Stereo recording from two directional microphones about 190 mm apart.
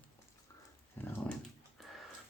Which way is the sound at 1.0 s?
10° left (ahead or behind).